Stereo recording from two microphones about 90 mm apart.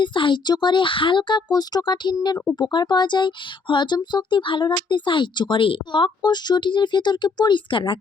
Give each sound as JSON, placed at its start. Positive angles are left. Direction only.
{"t": 0.0, "sound": "speech", "side_deg": 60}